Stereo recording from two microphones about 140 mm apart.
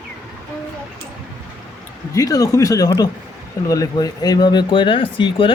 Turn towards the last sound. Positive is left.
turn(degrees=40)  # may be behind; listen again after turning